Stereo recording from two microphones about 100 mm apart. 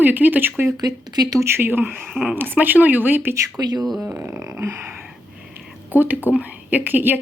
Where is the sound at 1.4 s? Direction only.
20° right (ahead or behind).